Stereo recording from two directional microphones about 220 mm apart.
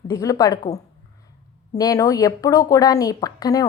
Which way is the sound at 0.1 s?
15° left (ahead or behind).